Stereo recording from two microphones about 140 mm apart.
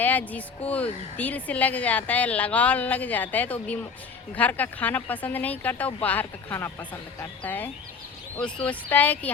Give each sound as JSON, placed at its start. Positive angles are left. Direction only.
{"t": 0.0, "sound": "a woman's voice", "side_deg": 10}